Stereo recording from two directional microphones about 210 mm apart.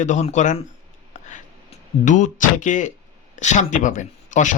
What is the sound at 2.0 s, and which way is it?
Speech, 35° left (ahead or behind).